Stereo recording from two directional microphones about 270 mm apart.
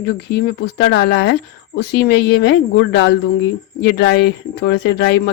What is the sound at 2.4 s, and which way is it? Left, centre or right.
Speech, left.